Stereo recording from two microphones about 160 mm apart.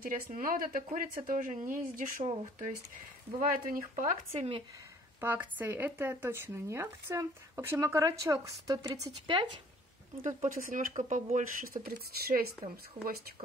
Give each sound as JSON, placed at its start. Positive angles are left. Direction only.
{"t": 0.0, "sound": "speech", "side_deg": -60}
{"t": 3.3, "sound": "speech", "side_deg": -60}
{"t": 4.3, "sound": "speech", "side_deg": -40}
{"t": 5.2, "sound": "speech", "side_deg": -10}
{"t": 10.2, "sound": "speech", "side_deg": -55}
{"t": 13.0, "sound": "speech", "side_deg": -55}